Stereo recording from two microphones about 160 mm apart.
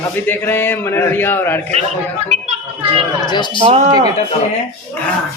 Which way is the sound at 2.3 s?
45° right (ahead or behind).